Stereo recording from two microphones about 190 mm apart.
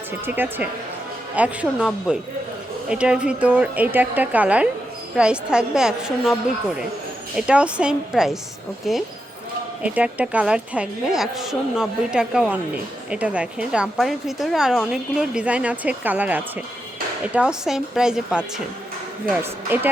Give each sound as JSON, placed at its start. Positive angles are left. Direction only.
{"t": 0.3, "sound": "a woman's voice", "side_deg": -10}
{"t": 7.3, "sound": "a woman's voice", "side_deg": -5}